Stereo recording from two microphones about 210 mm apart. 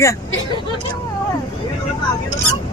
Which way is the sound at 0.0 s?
15° left (ahead or behind).